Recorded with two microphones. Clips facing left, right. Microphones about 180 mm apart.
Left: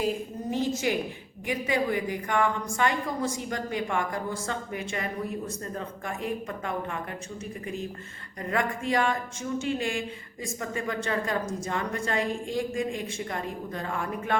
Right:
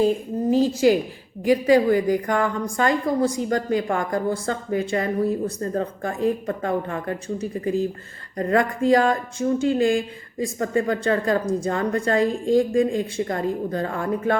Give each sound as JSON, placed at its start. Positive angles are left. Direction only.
{"t": 0.5, "sound": "a woman's voice", "side_deg": -30}